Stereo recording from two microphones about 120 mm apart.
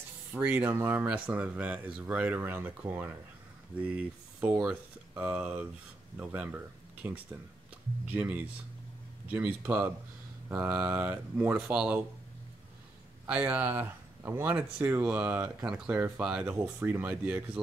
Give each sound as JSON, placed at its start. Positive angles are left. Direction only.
{"t": 0.3, "sound": "speech", "side_deg": -15}
{"t": 8.1, "sound": "speech", "side_deg": -15}
{"t": 13.3, "sound": "speech", "side_deg": -15}